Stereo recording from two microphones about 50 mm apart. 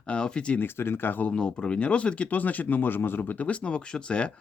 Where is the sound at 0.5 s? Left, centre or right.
Left.